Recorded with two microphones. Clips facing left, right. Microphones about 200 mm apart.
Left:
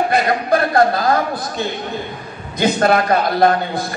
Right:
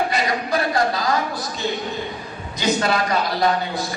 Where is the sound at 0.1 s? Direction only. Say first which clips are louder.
Left 6 dB; 55° left (ahead or behind).